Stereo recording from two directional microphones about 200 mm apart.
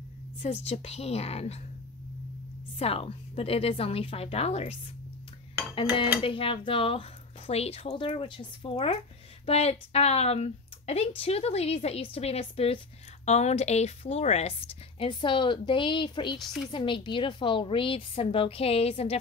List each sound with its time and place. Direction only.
0.4 s a woman's voice: 30° left (ahead or behind)
2.8 s a woman's voice: 30° left (ahead or behind)
6.2 s a woman's voice: 25° left (ahead or behind)